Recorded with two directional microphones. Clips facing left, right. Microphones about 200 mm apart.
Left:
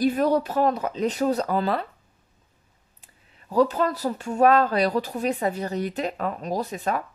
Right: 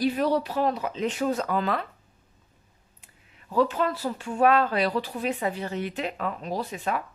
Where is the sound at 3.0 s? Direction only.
35° left (ahead or behind).